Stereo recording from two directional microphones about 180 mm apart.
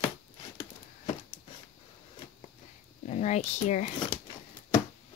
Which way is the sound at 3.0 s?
40° left (ahead or behind).